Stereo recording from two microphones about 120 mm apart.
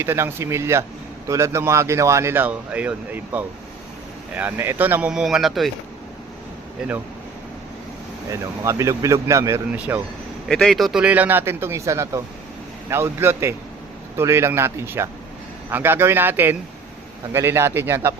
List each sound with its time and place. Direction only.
0.0 s speech: 20° right (ahead or behind); by 5.7 s centre (ahead or behind)
8.3 s speech: 25° right (ahead or behind)
9.7 s speech: 10° right (ahead or behind)
10.5 s speech: 5° left (ahead or behind)
11.0 s speech: 15° right (ahead or behind)